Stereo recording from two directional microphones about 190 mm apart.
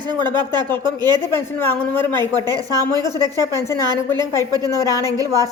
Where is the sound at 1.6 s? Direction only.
10° left (ahead or behind).